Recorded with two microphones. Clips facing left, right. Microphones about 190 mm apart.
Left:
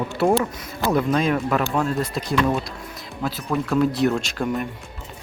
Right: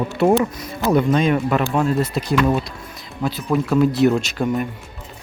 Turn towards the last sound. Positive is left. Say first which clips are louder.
# right 4 dB
turn(degrees=0)  # may be behind; listen again after turning